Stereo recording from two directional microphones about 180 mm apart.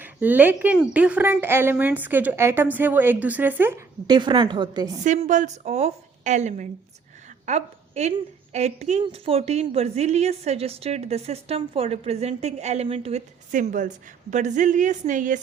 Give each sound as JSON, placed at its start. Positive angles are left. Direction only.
{"t": 0.0, "sound": "a woman's voice", "side_deg": -10}
{"t": 5.0, "sound": "a woman's voice", "side_deg": -45}